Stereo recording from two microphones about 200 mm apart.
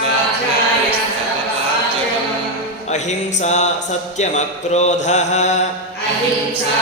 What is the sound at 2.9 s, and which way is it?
Mantra, 35° left (ahead or behind).